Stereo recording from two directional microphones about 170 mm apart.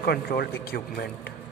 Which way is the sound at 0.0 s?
65° left (ahead or behind).